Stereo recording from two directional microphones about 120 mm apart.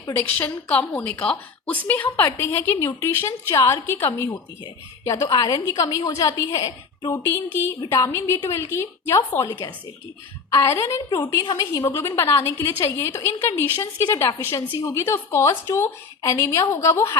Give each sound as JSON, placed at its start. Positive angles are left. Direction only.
{"t": 0.3, "sound": "a woman's voice", "side_deg": 15}
{"t": 4.6, "sound": "a woman's voice", "side_deg": 35}